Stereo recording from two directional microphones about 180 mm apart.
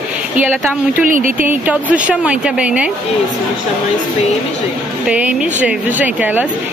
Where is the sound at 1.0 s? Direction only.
50° right (ahead or behind).